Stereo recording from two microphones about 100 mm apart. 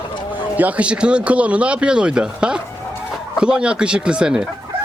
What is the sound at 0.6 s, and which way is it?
Speech, 15° right (ahead or behind).